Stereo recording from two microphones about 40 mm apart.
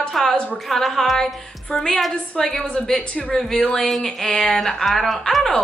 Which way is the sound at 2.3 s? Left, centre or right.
Centre.